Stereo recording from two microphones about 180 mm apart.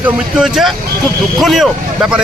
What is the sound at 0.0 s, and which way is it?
Speech, 5° right (ahead or behind).